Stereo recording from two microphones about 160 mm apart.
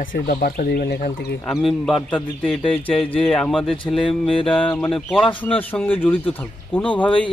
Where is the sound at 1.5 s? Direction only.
Centre (ahead or behind).